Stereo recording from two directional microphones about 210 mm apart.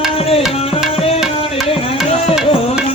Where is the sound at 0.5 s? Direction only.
30° left (ahead or behind).